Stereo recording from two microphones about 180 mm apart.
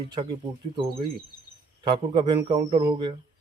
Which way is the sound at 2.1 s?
25° right (ahead or behind).